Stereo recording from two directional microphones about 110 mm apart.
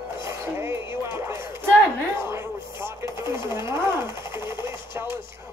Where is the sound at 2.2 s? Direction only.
25° right (ahead or behind).